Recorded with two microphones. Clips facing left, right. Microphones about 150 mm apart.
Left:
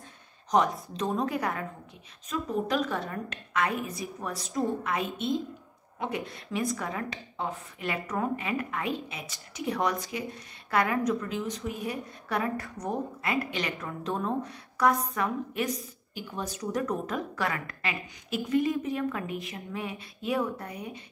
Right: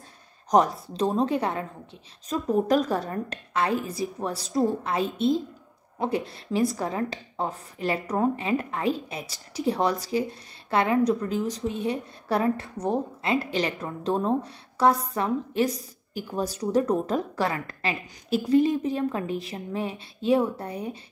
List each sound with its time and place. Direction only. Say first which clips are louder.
0.5 s a woman's voice: right 4 dB; 40° right (ahead or behind)
0.9 s a woman's voice: right 6 dB; 30° right (ahead or behind)
2.2 s a woman's voice: right 6 dB; 40° right (ahead or behind)